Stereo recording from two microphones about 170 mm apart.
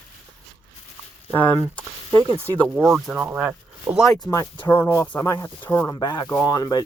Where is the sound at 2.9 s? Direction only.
5° right (ahead or behind).